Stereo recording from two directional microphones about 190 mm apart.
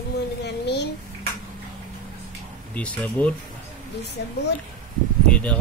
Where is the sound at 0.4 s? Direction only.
65° left (ahead or behind).